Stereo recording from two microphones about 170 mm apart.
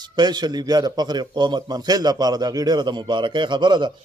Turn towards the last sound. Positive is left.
turn(degrees=-25)  # may be behind; listen again after turning